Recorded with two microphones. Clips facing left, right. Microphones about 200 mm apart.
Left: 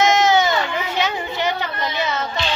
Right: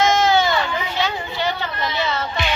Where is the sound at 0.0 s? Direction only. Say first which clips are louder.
Left 1 dB; 20° left (ahead or behind).